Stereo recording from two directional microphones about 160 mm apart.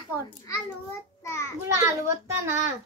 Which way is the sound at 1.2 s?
20° left (ahead or behind).